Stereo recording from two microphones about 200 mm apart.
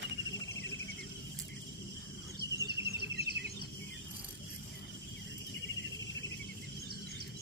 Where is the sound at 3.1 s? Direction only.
55° right (ahead or behind).